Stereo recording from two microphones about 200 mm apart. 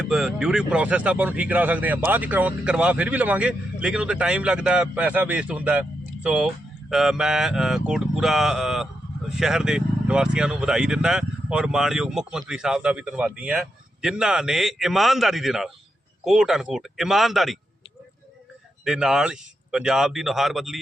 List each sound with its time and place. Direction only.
0.0 s a man's voice: 5° right (ahead or behind)
18.9 s speech: 5° right (ahead or behind)